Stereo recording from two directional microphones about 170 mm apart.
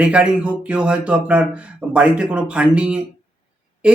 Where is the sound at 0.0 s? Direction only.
5° right (ahead or behind).